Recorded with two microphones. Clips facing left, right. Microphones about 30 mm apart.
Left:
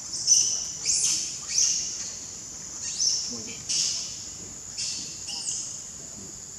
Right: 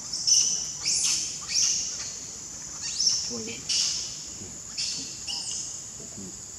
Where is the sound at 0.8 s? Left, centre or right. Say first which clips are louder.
Even; right.